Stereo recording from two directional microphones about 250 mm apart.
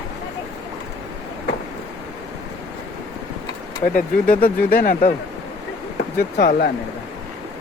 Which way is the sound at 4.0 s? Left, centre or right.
Left.